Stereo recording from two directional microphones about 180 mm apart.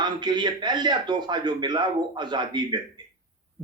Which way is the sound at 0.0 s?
25° right (ahead or behind).